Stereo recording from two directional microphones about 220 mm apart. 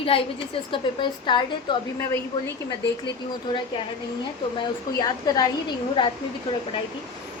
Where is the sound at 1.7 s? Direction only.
20° left (ahead or behind).